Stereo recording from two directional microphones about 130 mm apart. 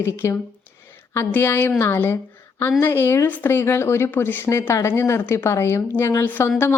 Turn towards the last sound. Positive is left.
turn(degrees=15)  # may be behind; listen again after turning